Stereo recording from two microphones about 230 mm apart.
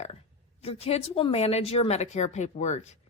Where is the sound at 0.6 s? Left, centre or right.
Left.